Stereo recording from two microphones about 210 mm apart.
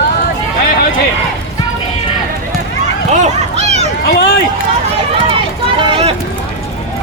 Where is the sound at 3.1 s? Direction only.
35° right (ahead or behind).